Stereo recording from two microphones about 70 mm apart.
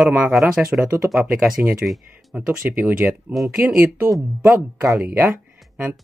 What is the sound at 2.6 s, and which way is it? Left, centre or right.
Speech, right.